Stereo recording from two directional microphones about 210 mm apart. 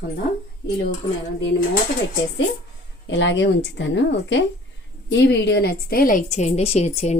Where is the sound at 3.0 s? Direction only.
60° left (ahead or behind).